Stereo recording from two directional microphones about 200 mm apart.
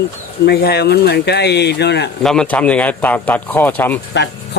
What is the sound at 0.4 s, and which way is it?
Speech, 55° left (ahead or behind).